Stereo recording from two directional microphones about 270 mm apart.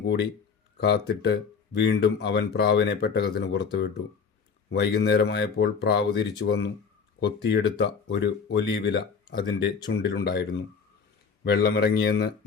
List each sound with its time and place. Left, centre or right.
0.0 s speech: left
11.4 s speech: left